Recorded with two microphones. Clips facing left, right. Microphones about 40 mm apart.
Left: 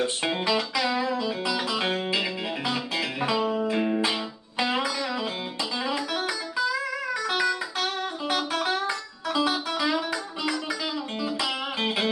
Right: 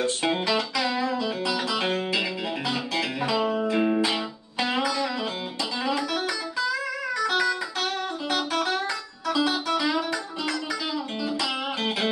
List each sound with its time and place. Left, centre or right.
0.2 s music: centre
3.7 s music: centre
4.6 s music: centre
8.8 s music: centre
9.5 s music: centre